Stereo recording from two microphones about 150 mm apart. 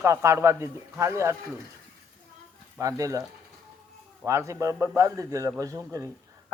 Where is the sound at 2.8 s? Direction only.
20° right (ahead or behind).